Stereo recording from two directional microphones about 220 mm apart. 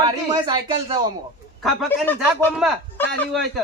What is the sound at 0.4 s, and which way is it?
Speech, 20° right (ahead or behind).